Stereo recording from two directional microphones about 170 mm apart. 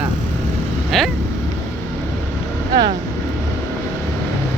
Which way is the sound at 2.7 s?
25° right (ahead or behind).